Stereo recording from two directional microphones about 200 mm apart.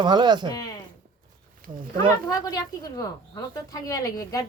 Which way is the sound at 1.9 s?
20° left (ahead or behind).